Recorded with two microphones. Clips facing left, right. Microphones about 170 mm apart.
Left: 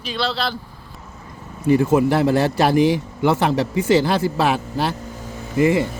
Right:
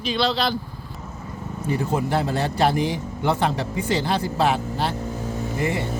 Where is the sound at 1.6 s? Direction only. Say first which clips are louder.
Left 9 dB; 85° left.